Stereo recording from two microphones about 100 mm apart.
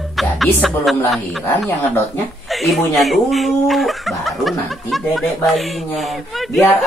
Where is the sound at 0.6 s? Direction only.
Centre (ahead or behind).